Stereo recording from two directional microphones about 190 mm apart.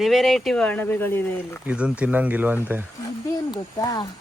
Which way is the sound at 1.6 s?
5° right (ahead or behind).